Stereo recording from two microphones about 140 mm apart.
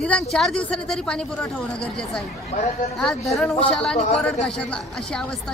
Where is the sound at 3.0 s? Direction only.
Centre (ahead or behind).